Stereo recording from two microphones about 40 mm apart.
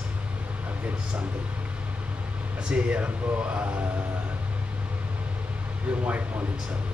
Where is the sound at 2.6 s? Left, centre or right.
Right.